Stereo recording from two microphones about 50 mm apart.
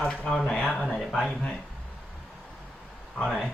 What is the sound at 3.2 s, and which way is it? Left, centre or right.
Speech, centre.